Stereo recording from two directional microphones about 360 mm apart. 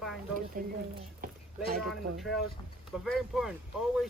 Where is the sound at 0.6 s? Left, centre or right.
Right.